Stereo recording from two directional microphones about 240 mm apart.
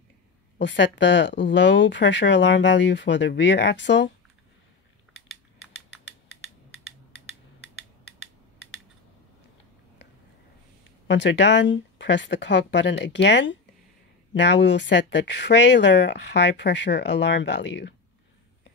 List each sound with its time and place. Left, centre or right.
0.6 s speech: left
11.1 s speech: left